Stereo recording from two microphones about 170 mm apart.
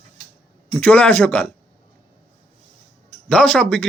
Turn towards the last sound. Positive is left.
turn(degrees=5)  # may be behind; listen again after turning